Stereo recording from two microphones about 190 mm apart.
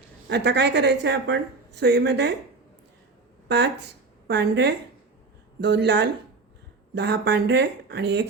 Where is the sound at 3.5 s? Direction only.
60° right (ahead or behind).